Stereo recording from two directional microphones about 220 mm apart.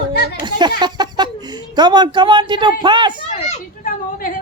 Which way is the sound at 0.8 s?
20° right (ahead or behind).